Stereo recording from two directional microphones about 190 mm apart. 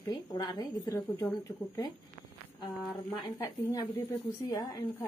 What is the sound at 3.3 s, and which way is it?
A woman's voice, 20° left (ahead or behind).